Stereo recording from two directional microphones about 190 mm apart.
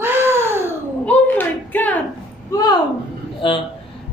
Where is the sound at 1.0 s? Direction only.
10° left (ahead or behind).